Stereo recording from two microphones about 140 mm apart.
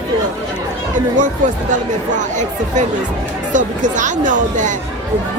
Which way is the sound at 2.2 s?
60° right (ahead or behind).